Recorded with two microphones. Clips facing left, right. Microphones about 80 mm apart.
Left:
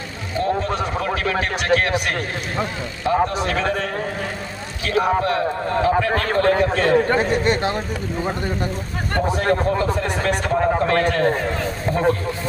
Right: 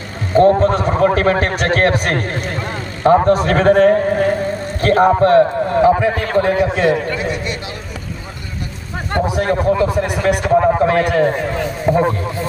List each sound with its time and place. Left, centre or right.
0.3 s a man's voice: right
5.8 s a man's voice: centre
7.1 s a man's voice: left
9.2 s a man's voice: centre
11.9 s a sound: centre